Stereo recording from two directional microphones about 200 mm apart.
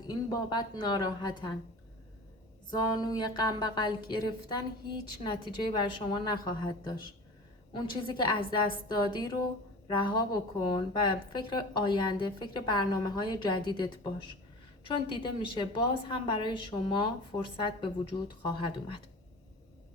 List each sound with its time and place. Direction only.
0.1 s speech: 20° left (ahead or behind)
2.6 s a woman's voice: 20° left (ahead or behind)